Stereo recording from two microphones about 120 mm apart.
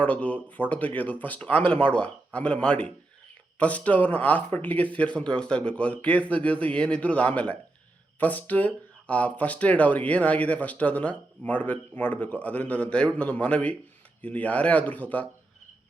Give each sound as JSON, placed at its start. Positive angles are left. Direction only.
{"t": 0.0, "sound": "speech", "side_deg": 10}